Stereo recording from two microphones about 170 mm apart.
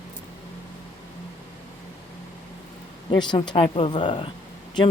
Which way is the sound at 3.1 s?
25° left (ahead or behind).